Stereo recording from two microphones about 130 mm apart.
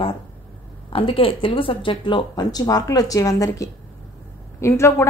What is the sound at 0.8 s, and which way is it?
A woman's voice, 45° left (ahead or behind).